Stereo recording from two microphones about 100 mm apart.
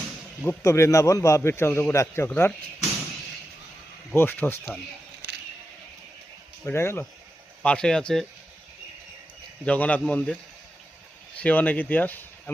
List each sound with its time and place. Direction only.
0.6 s a man's voice: 30° left (ahead or behind)
4.1 s a man's voice: 20° left (ahead or behind)
6.7 s a man's voice: 25° left (ahead or behind)
7.6 s speech: 10° left (ahead or behind)
9.6 s speech: 15° left (ahead or behind)
11.3 s speech: 15° left (ahead or behind)